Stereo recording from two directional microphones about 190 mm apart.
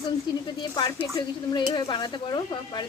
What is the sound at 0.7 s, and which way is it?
Speech, 20° left (ahead or behind).